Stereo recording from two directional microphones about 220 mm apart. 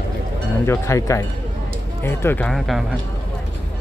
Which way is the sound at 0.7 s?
15° left (ahead or behind).